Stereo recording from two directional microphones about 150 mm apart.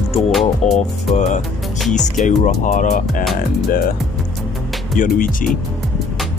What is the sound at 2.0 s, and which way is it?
Speech, 55° left (ahead or behind).